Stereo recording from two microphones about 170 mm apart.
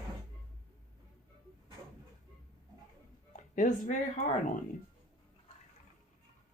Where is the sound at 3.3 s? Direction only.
50° left (ahead or behind).